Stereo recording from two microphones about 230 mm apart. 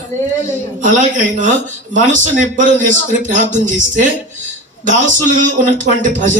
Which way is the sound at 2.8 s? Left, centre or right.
Left.